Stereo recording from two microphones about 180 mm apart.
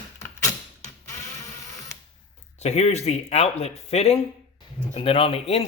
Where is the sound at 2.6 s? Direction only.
35° left (ahead or behind).